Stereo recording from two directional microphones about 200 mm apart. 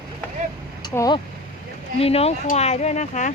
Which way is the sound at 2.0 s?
30° left (ahead or behind).